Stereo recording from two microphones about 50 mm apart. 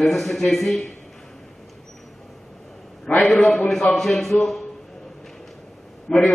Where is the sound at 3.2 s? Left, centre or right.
Centre.